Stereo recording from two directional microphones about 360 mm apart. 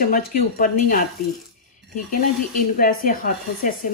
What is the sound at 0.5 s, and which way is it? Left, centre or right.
Speech, left.